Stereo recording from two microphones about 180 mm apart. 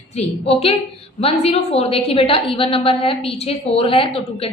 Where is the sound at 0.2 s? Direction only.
35° left (ahead or behind).